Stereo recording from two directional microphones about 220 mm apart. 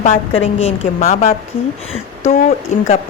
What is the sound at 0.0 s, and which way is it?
A woman's voice, 25° left (ahead or behind).